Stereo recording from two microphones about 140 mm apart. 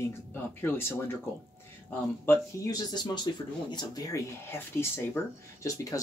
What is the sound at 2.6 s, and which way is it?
Speech, 25° left (ahead or behind).